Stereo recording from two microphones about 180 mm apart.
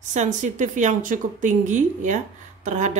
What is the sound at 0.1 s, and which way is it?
Speech, 40° right (ahead or behind).